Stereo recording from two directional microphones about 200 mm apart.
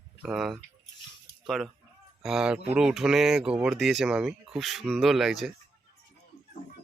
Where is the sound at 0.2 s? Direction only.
5° right (ahead or behind).